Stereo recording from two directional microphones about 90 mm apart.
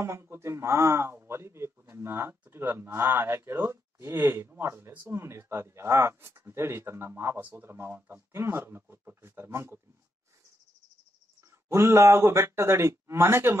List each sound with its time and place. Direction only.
0.0 s speech: 30° right (ahead or behind)
11.7 s speech: 30° right (ahead or behind)